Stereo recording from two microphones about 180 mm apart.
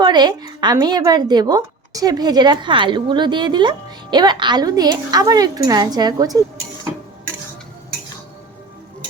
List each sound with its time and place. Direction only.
0.0 s a woman's voice: 25° right (ahead or behind)